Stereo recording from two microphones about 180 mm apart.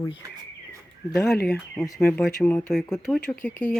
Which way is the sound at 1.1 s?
Centre (ahead or behind).